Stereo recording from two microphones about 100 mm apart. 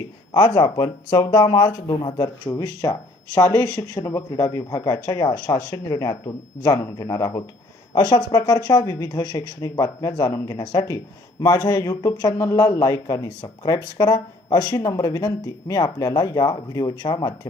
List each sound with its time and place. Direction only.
0.3 s speech: 40° left (ahead or behind)